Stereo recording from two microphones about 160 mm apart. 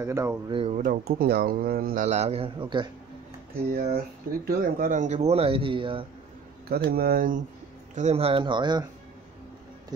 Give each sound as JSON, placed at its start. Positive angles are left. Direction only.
{"t": 0.0, "sound": "speech", "side_deg": -15}
{"t": 0.5, "sound": "speech", "side_deg": -35}
{"t": 0.7, "sound": "speech", "side_deg": -60}
{"t": 2.0, "sound": "speech", "side_deg": -40}
{"t": 3.5, "sound": "speech", "side_deg": -70}
{"t": 4.5, "sound": "speech", "side_deg": -60}
{"t": 6.7, "sound": "speech", "side_deg": -70}
{"t": 7.9, "sound": "speech", "side_deg": -45}